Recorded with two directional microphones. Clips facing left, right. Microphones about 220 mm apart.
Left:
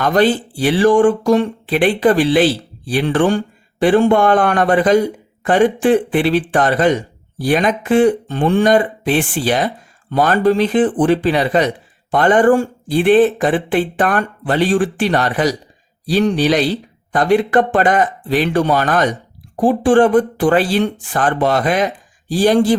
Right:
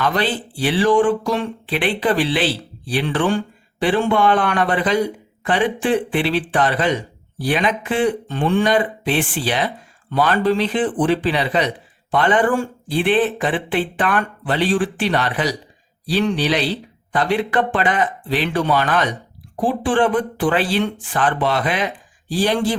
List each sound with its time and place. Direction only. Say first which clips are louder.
0.0 s speech: left 7 dB; 45° left (ahead or behind)